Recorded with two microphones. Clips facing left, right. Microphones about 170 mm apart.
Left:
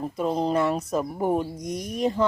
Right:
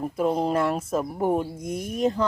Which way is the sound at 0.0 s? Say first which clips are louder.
Right 1 dB; 5° right (ahead or behind).